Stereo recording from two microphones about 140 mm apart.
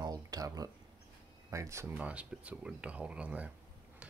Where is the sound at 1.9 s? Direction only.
10° right (ahead or behind).